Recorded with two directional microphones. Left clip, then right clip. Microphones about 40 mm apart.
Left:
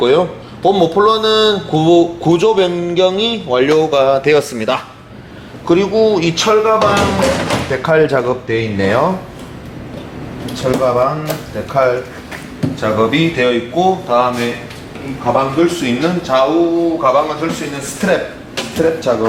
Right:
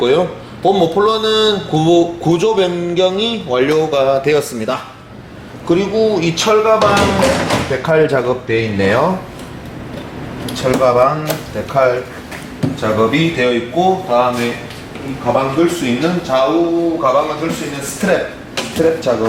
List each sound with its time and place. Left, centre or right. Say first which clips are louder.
0.0 s a man's voice: left 1 dB; centre
6.4 s speech: right 1 dB; centre
10.4 s speech: right 2 dB; centre